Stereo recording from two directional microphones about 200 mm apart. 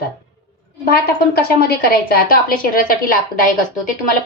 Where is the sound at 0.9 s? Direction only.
50° left (ahead or behind).